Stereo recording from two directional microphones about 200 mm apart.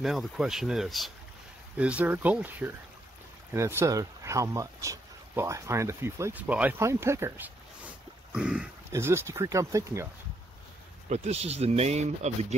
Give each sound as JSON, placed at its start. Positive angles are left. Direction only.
{"t": 0.0, "sound": "speech", "side_deg": 0}
{"t": 11.1, "sound": "speech", "side_deg": -30}